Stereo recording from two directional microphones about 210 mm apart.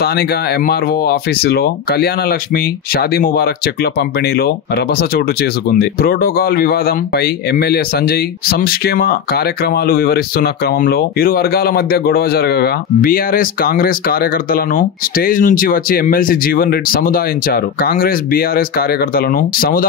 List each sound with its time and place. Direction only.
0.0 s speech: 50° left (ahead or behind)